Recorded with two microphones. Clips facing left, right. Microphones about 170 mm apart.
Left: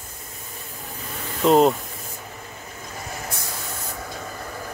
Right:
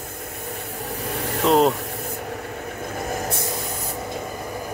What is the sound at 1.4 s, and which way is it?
Speech, centre (ahead or behind).